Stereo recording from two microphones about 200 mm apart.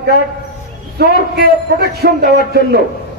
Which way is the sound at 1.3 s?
55° right (ahead or behind).